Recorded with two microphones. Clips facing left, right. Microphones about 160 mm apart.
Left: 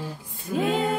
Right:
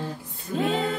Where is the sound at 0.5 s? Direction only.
10° left (ahead or behind).